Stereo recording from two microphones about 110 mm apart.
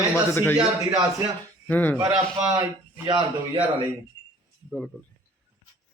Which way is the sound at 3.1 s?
50° right (ahead or behind).